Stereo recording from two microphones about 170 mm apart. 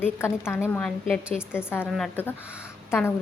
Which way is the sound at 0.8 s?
Centre (ahead or behind).